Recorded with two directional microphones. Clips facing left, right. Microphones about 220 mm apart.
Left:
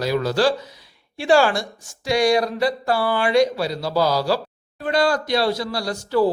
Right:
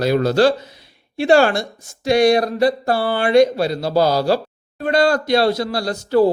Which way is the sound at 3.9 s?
55° right (ahead or behind).